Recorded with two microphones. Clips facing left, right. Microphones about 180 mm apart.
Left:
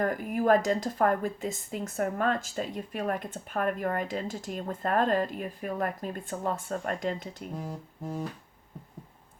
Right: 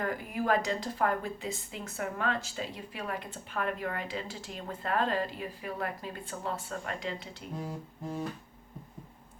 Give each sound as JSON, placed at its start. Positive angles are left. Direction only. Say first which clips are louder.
{"t": 0.0, "sound": "a woman's voice", "louder": "left 5 dB", "side_deg": 45}